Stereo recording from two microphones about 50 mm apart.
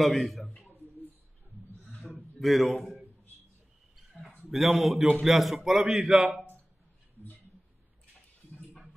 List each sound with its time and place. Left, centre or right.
0.0 s a man's voice: centre
2.4 s a man's voice: centre
4.1 s a sound: centre
4.5 s a man's voice: centre